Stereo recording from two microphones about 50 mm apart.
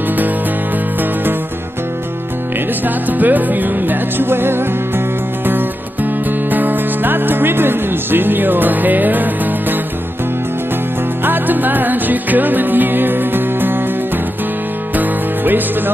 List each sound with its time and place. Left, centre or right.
2.8 s music: right
11.2 s music: right